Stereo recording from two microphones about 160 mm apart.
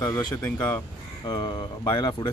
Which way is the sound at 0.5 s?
10° left (ahead or behind).